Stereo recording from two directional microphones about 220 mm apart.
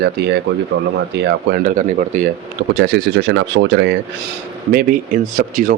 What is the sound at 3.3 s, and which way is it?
Speech, 55° right (ahead or behind).